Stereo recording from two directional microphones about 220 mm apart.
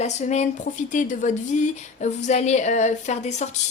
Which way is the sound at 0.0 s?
30° left (ahead or behind).